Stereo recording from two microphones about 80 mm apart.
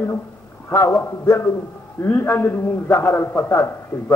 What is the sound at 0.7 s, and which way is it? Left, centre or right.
A man's voice, left.